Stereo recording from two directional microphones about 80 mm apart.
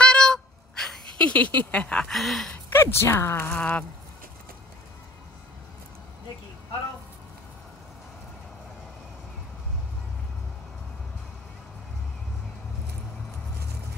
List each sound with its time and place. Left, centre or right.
0.0 s a sound: centre
2.1 s speech: centre
2.8 s speech: left
3.5 s speech: centre